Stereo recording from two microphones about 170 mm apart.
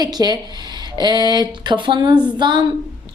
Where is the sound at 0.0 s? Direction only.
25° right (ahead or behind).